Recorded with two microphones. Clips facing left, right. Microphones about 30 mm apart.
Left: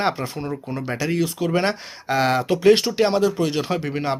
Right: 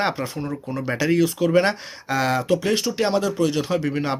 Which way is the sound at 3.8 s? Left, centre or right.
Centre.